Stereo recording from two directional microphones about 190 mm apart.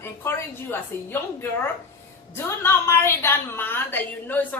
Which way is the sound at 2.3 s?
15° left (ahead or behind).